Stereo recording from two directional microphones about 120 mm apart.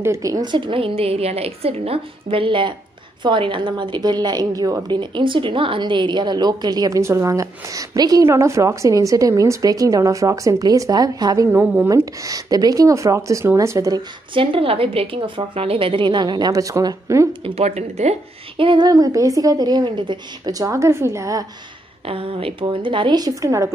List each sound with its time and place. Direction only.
0.0 s a woman's voice: 25° right (ahead or behind)
5.1 s a woman's voice: 45° right (ahead or behind)
11.5 s speech: 15° right (ahead or behind)
11.9 s speech: 30° right (ahead or behind)
14.3 s a woman's voice: 50° right (ahead or behind); by 17.3 s 25° right (ahead or behind)
17.3 s speech: 55° right (ahead or behind)
18.6 s a woman's voice: 45° right (ahead or behind)
18.9 s speech: 30° right (ahead or behind)
22.0 s a woman's voice: 50° right (ahead or behind); by 23.7 s 25° right (ahead or behind)